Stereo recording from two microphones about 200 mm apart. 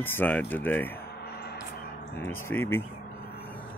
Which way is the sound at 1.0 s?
50° left (ahead or behind).